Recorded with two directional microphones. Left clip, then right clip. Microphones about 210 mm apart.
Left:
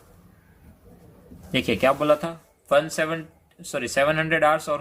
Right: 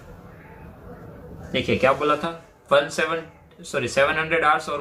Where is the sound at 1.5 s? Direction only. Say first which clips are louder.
Right 1 dB; 55° left (ahead or behind).